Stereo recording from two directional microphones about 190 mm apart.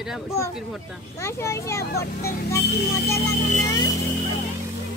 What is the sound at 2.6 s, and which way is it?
Speech, 60° left (ahead or behind).